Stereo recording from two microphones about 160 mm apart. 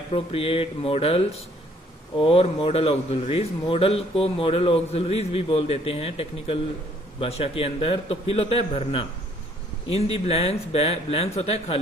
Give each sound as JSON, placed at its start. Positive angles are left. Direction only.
{"t": 0.1, "sound": "a man's voice", "side_deg": 35}